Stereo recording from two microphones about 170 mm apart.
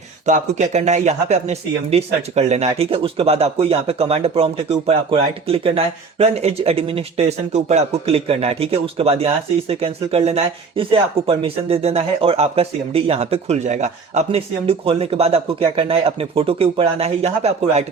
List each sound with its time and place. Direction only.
0.3 s speech: 45° right (ahead or behind)